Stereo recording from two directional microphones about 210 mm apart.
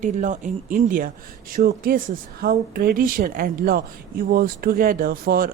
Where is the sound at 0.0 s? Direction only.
35° right (ahead or behind).